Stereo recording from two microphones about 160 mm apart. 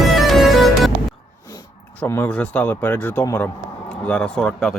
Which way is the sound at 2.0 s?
15° left (ahead or behind).